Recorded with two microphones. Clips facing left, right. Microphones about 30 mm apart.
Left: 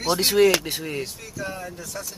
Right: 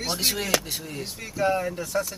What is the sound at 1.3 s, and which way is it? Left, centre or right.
Speech, right.